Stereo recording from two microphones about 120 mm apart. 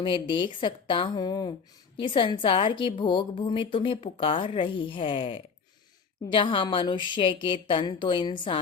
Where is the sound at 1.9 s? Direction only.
45° left (ahead or behind).